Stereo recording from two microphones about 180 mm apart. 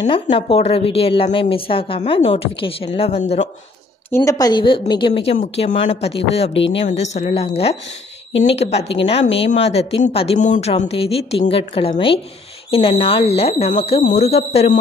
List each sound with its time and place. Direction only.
0.0 s a woman's voice: 30° left (ahead or behind)
4.1 s a woman's voice: 15° left (ahead or behind); by 14.8 s 35° left (ahead or behind)